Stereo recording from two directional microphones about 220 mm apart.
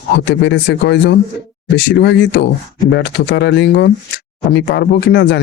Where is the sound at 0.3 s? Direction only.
55° left (ahead or behind).